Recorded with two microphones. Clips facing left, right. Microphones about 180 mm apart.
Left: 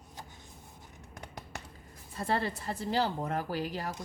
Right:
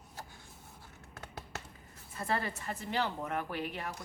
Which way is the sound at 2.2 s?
30° left (ahead or behind).